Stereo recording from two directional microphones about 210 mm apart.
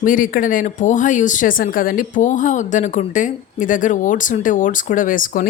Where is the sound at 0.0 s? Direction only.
40° left (ahead or behind).